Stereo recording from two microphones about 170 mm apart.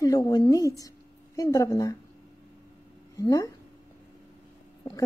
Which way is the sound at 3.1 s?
20° left (ahead or behind).